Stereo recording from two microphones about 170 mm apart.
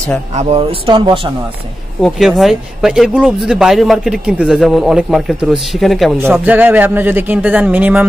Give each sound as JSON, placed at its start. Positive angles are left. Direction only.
{"t": 0.4, "sound": "speech", "side_deg": -35}
{"t": 2.0, "sound": "speech", "side_deg": 0}
{"t": 6.1, "sound": "speech", "side_deg": -15}